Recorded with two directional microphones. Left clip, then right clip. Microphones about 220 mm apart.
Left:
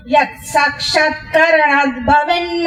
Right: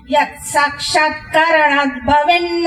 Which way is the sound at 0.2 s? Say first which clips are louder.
Even; 20° right (ahead or behind).